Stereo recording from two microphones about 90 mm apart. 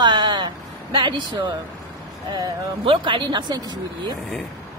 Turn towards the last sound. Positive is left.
turn(degrees=-55)  # may be behind; listen again after turning